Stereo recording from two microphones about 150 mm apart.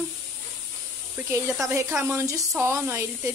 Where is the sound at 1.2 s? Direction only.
15° right (ahead or behind).